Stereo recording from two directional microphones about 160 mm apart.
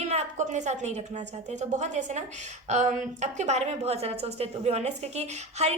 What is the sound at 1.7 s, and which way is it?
A woman's voice, 50° right (ahead or behind).